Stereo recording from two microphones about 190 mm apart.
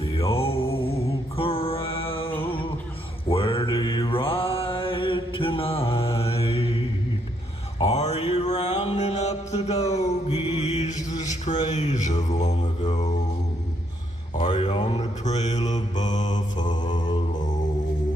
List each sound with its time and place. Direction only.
0.0 s music: 30° left (ahead or behind)
3.2 s mantra: 30° left (ahead or behind)
7.9 s a sound: 35° left (ahead or behind)
9.0 s mantra: 35° left (ahead or behind)
9.5 s music: 35° left (ahead or behind)
10.2 s mantra: 35° left (ahead or behind)
11.4 s a sound: 35° left (ahead or behind)
14.4 s mantra: 30° left (ahead or behind)
16.6 s mantra: 25° left (ahead or behind)